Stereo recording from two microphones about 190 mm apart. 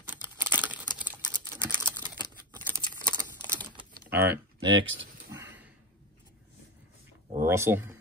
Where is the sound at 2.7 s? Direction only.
15° right (ahead or behind).